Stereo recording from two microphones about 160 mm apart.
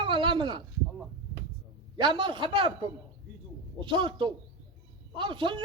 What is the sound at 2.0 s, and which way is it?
A man's voice, 30° right (ahead or behind).